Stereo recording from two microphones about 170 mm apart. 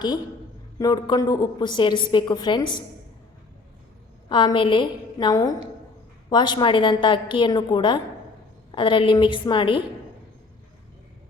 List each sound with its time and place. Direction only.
0.8 s a woman's voice: 25° left (ahead or behind)
4.3 s a woman's voice: 30° left (ahead or behind)